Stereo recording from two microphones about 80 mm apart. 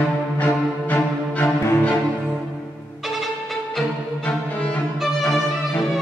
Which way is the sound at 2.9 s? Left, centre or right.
Centre.